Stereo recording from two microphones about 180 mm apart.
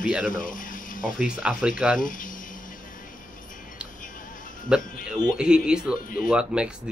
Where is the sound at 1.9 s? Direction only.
50° left (ahead or behind).